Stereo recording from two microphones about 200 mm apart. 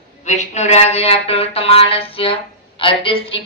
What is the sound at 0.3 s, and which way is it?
Music, 35° left (ahead or behind).